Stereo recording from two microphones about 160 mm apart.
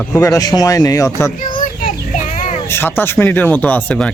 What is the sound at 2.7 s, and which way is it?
Speech, 15° left (ahead or behind).